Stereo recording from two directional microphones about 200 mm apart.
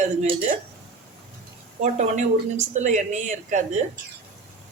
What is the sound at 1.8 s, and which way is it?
Speech, 35° right (ahead or behind).